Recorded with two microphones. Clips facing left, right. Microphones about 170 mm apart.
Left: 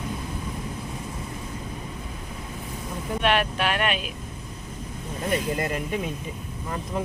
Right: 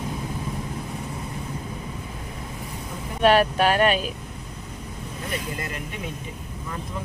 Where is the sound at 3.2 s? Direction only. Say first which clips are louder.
Right 6 dB; 40° right (ahead or behind).